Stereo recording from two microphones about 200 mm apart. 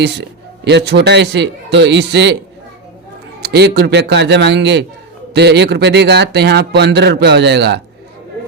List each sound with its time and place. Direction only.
0.0 s a man's voice: 60° right (ahead or behind)
3.4 s a man's voice: 55° right (ahead or behind)